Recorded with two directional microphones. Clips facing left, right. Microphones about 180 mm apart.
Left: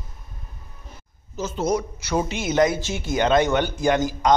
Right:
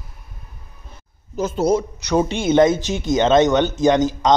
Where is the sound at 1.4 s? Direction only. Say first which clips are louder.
Right 6 dB; 50° right (ahead or behind).